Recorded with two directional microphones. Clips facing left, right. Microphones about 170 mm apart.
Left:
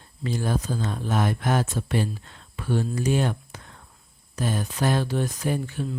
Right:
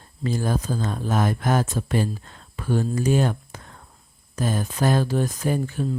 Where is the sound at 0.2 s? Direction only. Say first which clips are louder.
Right 2 dB; 45° right (ahead or behind).